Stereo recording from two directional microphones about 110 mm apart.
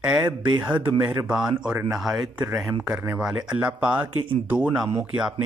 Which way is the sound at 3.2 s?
5° right (ahead or behind).